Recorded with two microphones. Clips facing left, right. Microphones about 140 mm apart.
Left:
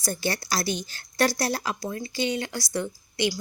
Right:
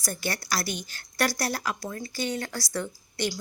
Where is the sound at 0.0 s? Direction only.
25° left (ahead or behind).